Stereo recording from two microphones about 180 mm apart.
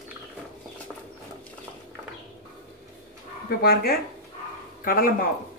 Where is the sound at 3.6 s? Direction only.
60° left (ahead or behind).